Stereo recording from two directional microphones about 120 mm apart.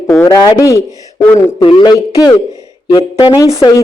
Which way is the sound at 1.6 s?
45° left (ahead or behind).